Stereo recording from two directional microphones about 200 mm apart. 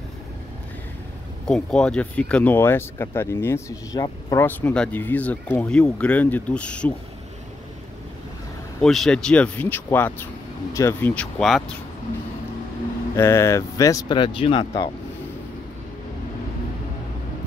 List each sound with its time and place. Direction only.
1.5 s speech: 5° left (ahead or behind)
8.8 s speech: centre (ahead or behind)
13.1 s speech: 15° left (ahead or behind)